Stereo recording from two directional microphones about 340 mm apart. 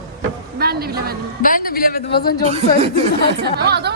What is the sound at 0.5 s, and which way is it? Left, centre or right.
Speech, right.